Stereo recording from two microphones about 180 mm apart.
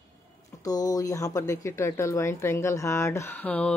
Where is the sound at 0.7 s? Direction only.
20° left (ahead or behind).